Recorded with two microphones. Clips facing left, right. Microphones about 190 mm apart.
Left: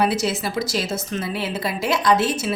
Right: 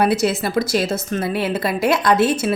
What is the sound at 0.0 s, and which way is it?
A woman's voice, 55° right (ahead or behind).